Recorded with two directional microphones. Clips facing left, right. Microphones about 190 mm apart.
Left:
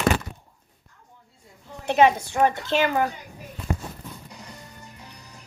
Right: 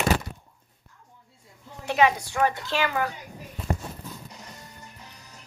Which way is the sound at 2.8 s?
40° left (ahead or behind).